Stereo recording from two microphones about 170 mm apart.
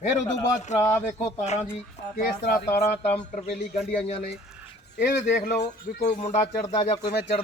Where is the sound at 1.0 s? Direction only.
40° left (ahead or behind).